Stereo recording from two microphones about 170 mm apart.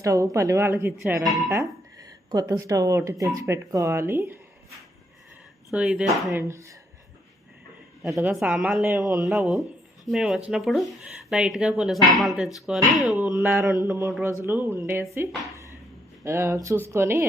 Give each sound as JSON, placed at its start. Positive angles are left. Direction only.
{"t": 0.0, "sound": "a woman's voice", "side_deg": -20}
{"t": 5.7, "sound": "speech", "side_deg": -5}
{"t": 6.1, "sound": "a woman's voice", "side_deg": -20}
{"t": 8.1, "sound": "speech", "side_deg": -10}
{"t": 8.8, "sound": "a woman's voice", "side_deg": -15}
{"t": 9.1, "sound": "a woman's voice", "side_deg": 0}
{"t": 16.2, "sound": "a woman's voice", "side_deg": -15}